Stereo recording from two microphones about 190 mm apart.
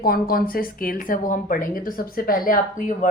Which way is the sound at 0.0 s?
50° left (ahead or behind).